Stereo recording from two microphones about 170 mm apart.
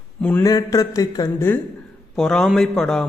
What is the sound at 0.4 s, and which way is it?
Speech, 20° left (ahead or behind).